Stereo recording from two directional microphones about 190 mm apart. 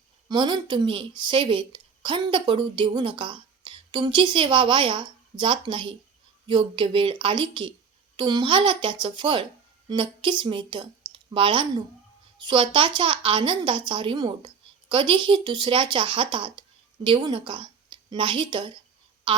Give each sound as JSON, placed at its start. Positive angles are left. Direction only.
{"t": 0.3, "sound": "a woman's voice", "side_deg": -25}